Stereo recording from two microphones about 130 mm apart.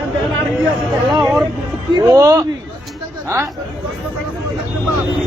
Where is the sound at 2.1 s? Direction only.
25° right (ahead or behind).